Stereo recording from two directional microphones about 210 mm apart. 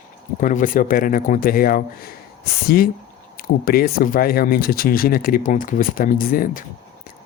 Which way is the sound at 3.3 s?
45° left (ahead or behind).